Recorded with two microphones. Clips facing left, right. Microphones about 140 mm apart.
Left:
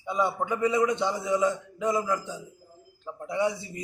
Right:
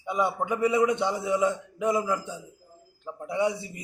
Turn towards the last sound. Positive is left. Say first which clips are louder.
# right 1 dB
turn(degrees=-15)  # may be behind; listen again after turning